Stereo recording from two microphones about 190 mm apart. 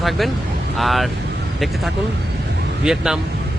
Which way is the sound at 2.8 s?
5° right (ahead or behind).